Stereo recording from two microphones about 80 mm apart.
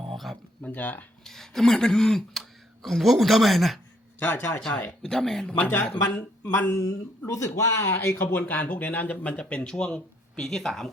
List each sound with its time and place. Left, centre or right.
0.1 s a sound: centre
0.6 s speech: left
1.2 s speech: centre
4.2 s speech: left
5.1 s speech: centre
5.8 s speech: centre
7.3 s speech: left; by 10.9 s centre